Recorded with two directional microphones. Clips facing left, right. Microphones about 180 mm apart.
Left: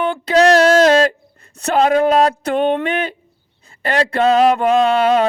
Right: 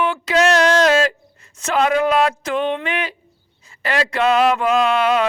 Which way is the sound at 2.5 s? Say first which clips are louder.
Left 4 dB; 40° left (ahead or behind).